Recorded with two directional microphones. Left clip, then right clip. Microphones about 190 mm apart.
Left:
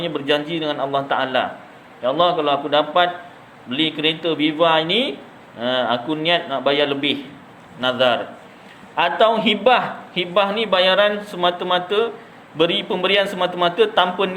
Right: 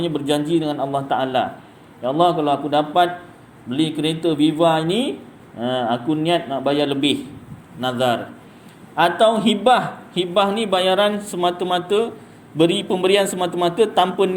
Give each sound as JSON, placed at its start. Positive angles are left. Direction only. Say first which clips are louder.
{"t": 0.0, "sound": "a man's voice", "louder": "left 1 dB", "side_deg": -30}